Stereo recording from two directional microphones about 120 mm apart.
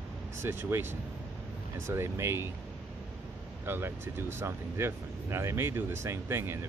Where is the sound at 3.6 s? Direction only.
20° right (ahead or behind).